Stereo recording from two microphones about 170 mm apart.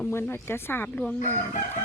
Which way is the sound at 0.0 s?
15° left (ahead or behind).